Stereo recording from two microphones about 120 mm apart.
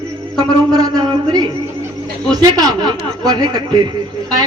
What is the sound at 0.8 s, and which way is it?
Speech, 35° right (ahead or behind).